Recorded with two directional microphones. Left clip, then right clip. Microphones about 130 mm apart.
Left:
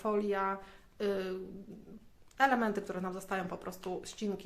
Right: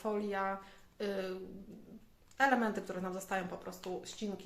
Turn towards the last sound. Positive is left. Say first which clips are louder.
# left 3 dB
turn(degrees=50)  # may be behind; listen again after turning